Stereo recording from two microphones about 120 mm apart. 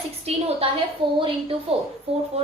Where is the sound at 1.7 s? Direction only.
55° right (ahead or behind).